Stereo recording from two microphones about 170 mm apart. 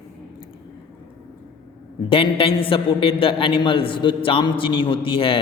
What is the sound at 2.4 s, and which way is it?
A man's voice, 30° left (ahead or behind).